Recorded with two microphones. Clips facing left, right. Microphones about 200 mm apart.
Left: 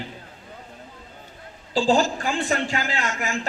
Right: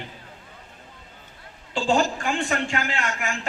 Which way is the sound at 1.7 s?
35° left (ahead or behind).